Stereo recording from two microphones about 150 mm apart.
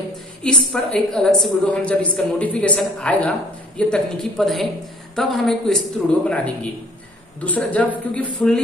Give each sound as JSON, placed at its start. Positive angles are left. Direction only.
{"t": 0.4, "sound": "a woman's voice", "side_deg": 5}